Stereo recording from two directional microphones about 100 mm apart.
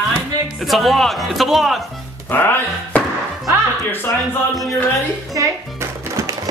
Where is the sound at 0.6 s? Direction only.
Centre (ahead or behind).